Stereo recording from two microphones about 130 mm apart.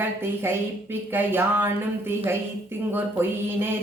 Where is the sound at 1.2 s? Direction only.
15° right (ahead or behind).